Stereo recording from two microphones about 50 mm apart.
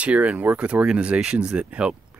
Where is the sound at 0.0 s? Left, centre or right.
Right.